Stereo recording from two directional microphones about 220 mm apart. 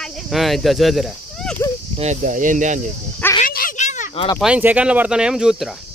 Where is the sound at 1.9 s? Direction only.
35° right (ahead or behind).